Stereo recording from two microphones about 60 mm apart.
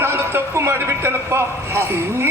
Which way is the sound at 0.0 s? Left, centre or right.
Right.